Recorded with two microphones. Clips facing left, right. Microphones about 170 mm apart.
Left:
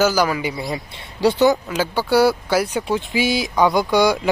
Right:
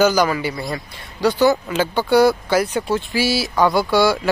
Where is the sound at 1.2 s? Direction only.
25° left (ahead or behind).